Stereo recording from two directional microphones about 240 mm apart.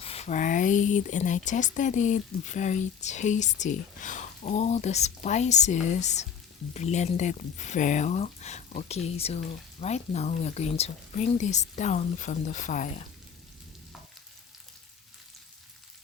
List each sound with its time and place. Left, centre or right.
0.0 s speech: left